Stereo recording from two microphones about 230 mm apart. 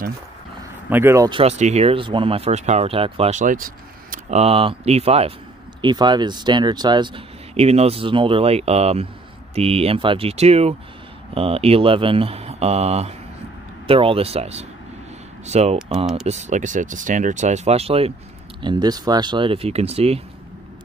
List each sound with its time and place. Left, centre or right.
0.8 s speech: centre
1.4 s speech: right